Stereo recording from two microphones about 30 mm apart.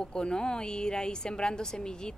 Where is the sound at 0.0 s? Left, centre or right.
Left.